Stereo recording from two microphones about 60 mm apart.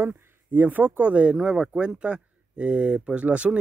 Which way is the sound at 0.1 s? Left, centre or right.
Right.